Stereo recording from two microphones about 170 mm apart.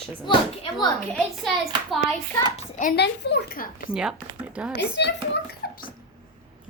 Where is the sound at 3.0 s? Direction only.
85° left.